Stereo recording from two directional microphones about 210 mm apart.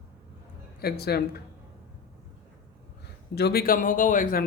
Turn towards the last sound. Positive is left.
turn(degrees=40)  # may be behind; listen again after turning